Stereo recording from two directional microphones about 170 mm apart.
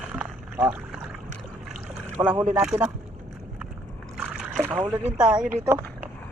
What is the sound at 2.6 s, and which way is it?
Speech, 5° right (ahead or behind).